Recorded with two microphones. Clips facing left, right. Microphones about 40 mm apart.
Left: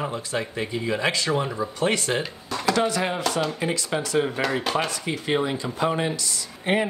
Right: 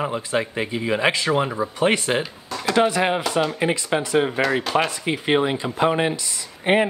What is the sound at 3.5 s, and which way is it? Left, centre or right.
Speech, right.